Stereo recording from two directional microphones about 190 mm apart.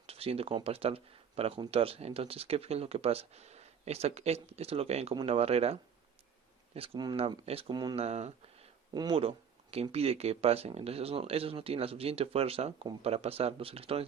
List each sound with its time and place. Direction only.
0.0 s speech: 30° right (ahead or behind)
6.7 s speech: 30° right (ahead or behind)
8.0 s speech: 35° right (ahead or behind)
8.9 s speech: 25° right (ahead or behind)